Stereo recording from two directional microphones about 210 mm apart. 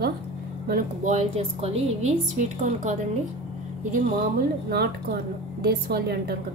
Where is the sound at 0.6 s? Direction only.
40° right (ahead or behind).